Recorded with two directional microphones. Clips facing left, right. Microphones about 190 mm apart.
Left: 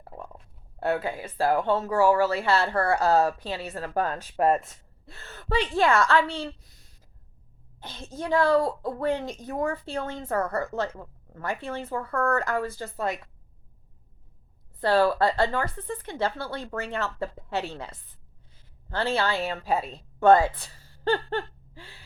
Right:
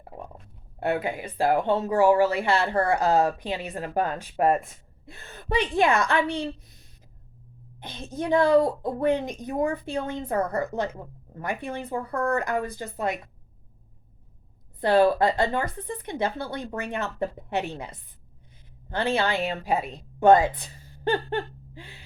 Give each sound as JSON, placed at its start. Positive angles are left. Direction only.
{"t": 0.8, "sound": "speech", "side_deg": -15}
{"t": 14.8, "sound": "a woman's voice", "side_deg": -15}